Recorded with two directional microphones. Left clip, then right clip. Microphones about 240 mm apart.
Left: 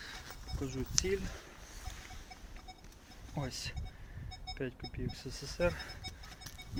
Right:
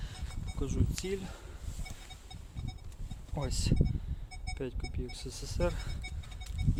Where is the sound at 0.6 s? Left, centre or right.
Centre.